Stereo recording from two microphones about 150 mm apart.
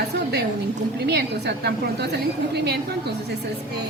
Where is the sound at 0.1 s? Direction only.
90° right.